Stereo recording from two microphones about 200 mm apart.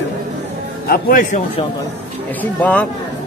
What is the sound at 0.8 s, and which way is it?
Speech, 45° left (ahead or behind).